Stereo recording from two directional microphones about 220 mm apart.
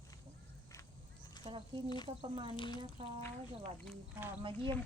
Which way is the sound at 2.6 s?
20° left (ahead or behind).